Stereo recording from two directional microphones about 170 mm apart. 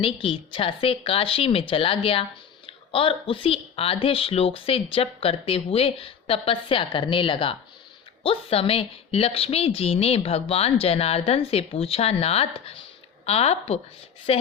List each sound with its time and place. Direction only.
0.0 s speech: 30° left (ahead or behind)